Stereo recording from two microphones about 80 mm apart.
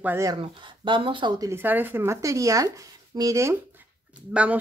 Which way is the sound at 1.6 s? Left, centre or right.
Right.